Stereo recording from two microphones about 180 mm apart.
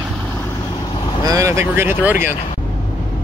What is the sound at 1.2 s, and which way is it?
Speech, 15° right (ahead or behind).